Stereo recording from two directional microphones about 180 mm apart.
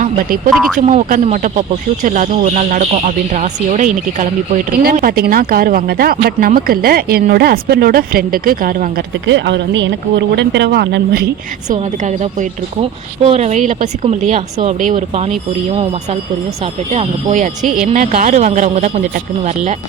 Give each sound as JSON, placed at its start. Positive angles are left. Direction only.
{"t": 0.0, "sound": "speech", "side_deg": -50}
{"t": 0.5, "sound": "speech", "side_deg": 0}
{"t": 0.8, "sound": "speech", "side_deg": -45}
{"t": 4.7, "sound": "speech", "side_deg": -55}
{"t": 9.2, "sound": "speech", "side_deg": -80}
{"t": 11.7, "sound": "a woman's voice", "side_deg": -45}
{"t": 16.9, "sound": "speech", "side_deg": -40}